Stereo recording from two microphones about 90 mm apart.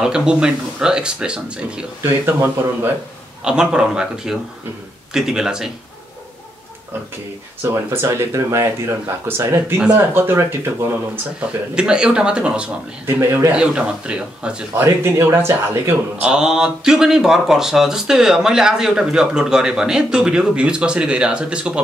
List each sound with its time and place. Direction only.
0.0 s speech: 10° right (ahead or behind)
2.0 s speech: 25° right (ahead or behind)
3.4 s a man's voice: 10° right (ahead or behind)
7.6 s speech: 30° right (ahead or behind)
11.7 s speech: 10° right (ahead or behind)
13.0 s speech: 30° right (ahead or behind)
13.5 s speech: 10° right (ahead or behind)
14.8 s speech: 30° right (ahead or behind)
16.2 s speech: 10° right (ahead or behind)